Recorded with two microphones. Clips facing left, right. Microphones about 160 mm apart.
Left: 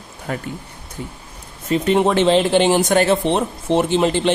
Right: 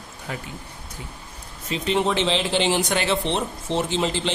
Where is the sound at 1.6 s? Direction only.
50° left (ahead or behind).